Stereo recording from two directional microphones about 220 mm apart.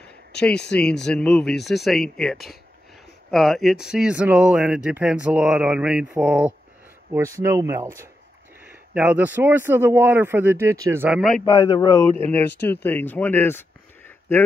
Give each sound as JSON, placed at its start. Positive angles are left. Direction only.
{"t": 0.7, "sound": "speech", "side_deg": 5}
{"t": 11.4, "sound": "speech", "side_deg": 15}